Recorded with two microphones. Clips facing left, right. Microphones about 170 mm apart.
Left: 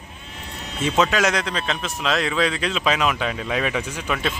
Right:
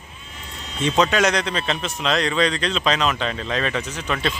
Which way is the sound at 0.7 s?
5° left (ahead or behind).